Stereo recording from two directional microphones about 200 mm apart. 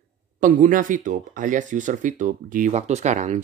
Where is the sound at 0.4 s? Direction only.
40° right (ahead or behind).